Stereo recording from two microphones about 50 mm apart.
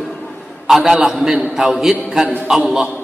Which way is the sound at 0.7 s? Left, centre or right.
Centre.